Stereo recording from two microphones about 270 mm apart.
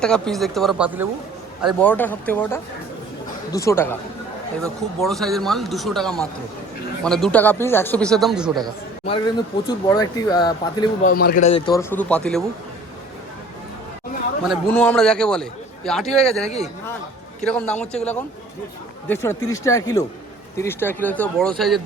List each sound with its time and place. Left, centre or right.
0.0 s a man's voice: centre
9.0 s speech: centre
11.0 s a man's voice: left
11.7 s a man's voice: centre
14.4 s a man's voice: centre